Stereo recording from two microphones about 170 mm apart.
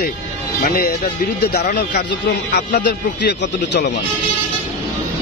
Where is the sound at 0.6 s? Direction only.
55° left (ahead or behind).